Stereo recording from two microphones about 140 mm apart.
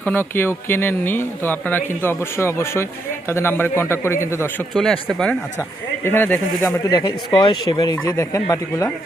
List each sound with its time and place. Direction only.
0.0 s speech: 15° left (ahead or behind)
4.7 s speech: centre (ahead or behind)
6.9 s speech: 30° left (ahead or behind)